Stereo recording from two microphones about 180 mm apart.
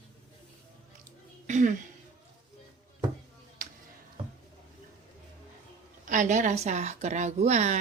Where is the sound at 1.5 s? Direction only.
40° right (ahead or behind).